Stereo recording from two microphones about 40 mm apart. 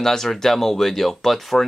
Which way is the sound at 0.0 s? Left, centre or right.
Centre.